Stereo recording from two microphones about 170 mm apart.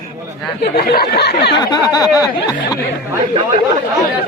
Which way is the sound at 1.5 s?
25° left (ahead or behind).